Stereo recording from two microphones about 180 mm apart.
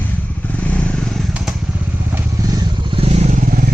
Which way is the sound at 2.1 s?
20° right (ahead or behind).